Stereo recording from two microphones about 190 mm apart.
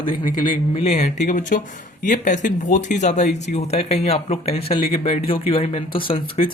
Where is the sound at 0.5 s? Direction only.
35° left (ahead or behind).